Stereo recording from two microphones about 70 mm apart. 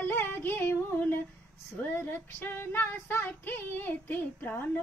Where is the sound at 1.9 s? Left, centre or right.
Left.